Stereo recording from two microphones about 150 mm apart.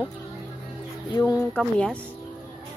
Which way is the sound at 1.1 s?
25° left (ahead or behind).